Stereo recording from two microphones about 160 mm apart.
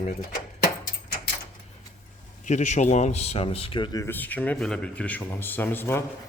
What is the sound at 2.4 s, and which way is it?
Speech, 50° left (ahead or behind).